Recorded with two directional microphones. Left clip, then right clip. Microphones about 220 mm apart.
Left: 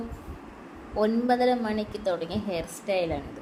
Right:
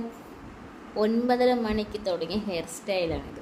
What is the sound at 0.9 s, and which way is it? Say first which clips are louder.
A woman's voice: even; 10° right (ahead or behind).